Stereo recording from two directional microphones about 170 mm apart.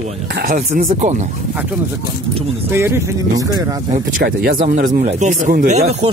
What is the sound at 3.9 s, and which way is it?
Speech, 55° right (ahead or behind).